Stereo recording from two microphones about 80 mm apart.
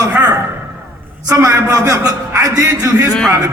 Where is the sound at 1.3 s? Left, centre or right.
Right.